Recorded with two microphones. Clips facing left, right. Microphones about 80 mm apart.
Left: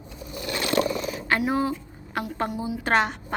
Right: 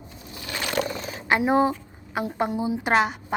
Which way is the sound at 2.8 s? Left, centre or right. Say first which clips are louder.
Even; centre.